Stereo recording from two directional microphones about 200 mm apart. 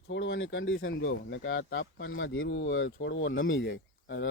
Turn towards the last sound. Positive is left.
turn(degrees=65)  # may be behind; listen again after turning